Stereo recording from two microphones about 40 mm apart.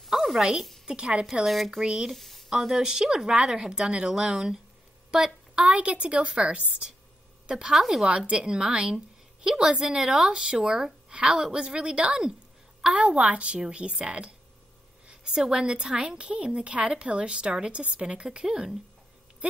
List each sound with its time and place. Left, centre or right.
0.0 s a sound: centre
0.8 s a woman's voice: right
1.4 s speech: centre
1.8 s a woman's voice: centre
2.1 s speech: centre
2.5 s a woman's voice: centre
5.1 s a sound: centre
5.7 s a woman's voice: right
7.7 s a woman's voice: centre
8.3 s a woman's voice: centre
13.5 s a woman's voice: right